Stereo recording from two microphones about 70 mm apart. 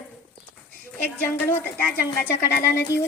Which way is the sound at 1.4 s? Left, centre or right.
Left.